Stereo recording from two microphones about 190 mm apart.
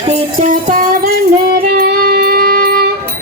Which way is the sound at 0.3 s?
45° right (ahead or behind).